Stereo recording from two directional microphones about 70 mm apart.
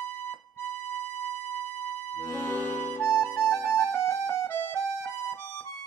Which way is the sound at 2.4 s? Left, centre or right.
Left.